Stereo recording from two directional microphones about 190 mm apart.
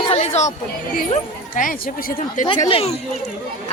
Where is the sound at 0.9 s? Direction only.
45° left (ahead or behind).